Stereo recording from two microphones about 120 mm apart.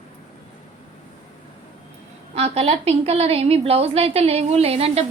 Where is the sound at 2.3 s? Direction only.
60° right (ahead or behind).